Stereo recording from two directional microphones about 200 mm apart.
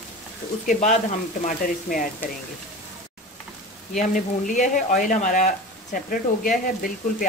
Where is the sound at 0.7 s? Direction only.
40° left (ahead or behind).